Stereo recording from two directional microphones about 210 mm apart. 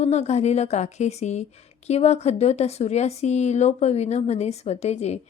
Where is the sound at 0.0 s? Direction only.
30° left (ahead or behind).